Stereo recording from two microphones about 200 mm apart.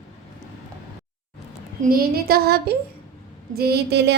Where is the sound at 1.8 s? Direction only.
50° right (ahead or behind).